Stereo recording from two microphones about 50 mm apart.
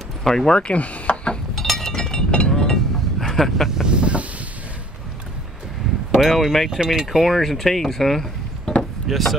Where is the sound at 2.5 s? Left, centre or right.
Centre.